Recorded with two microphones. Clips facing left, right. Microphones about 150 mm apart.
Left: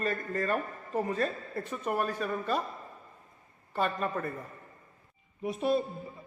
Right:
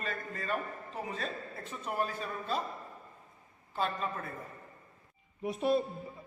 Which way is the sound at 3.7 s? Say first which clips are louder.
Left 3 dB; 55° left (ahead or behind).